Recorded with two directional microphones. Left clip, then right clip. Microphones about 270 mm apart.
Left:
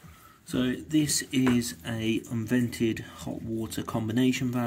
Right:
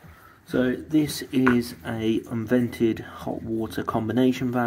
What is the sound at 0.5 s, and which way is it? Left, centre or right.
Speech, left.